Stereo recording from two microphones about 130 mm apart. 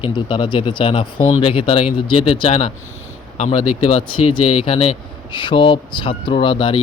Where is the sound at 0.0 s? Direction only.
40° left (ahead or behind).